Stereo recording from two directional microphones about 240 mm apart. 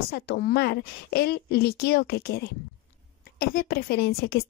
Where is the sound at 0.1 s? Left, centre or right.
Left.